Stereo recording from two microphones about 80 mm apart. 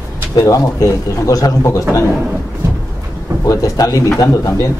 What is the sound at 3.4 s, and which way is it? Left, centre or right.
Speech, left.